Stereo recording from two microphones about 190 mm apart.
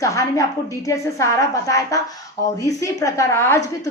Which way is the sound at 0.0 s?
15° left (ahead or behind).